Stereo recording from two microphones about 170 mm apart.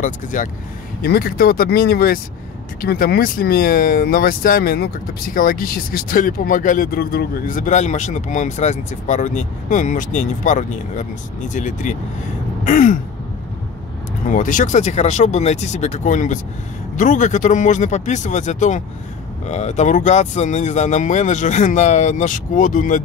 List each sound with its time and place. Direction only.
0.0 s speech: 50° left (ahead or behind)
1.0 s speech: 60° left (ahead or behind)
14.3 s speech: 50° left (ahead or behind)